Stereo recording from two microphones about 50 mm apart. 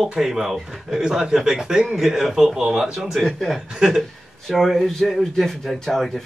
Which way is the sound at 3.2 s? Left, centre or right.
Centre.